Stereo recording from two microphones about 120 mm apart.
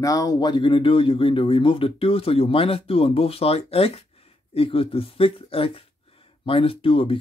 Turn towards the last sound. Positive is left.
turn(degrees=50)  # may be behind; listen again after turning